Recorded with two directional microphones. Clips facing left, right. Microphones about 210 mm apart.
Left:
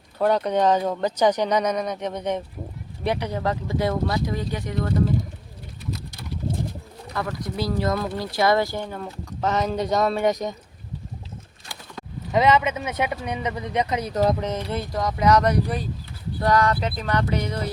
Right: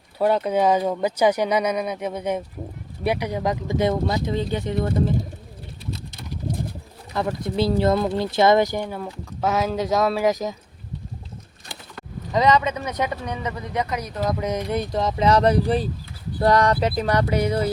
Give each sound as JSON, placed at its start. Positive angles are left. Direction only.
{"t": 0.2, "sound": "speech", "side_deg": -5}
{"t": 7.1, "sound": "speech", "side_deg": -25}
{"t": 12.3, "sound": "speech", "side_deg": 10}
{"t": 14.1, "sound": "speech", "side_deg": 40}
{"t": 14.3, "sound": "speech", "side_deg": -10}
{"t": 16.4, "sound": "a sound", "side_deg": -35}
{"t": 17.2, "sound": "speech", "side_deg": -10}